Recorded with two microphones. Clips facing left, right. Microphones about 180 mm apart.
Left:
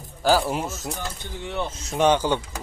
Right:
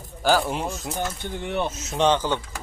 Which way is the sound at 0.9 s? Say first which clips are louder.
Right 5 dB; 55° right (ahead or behind).